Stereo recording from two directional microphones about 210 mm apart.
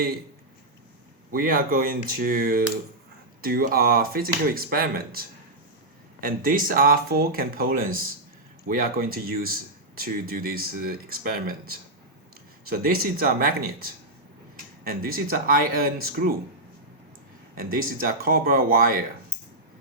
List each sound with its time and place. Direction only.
1.3 s speech: 45° right (ahead or behind)
14.8 s speech: 45° right (ahead or behind)
17.5 s speech: 45° right (ahead or behind)